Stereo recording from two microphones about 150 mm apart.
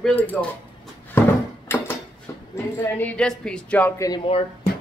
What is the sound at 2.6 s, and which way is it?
Speech, 15° left (ahead or behind).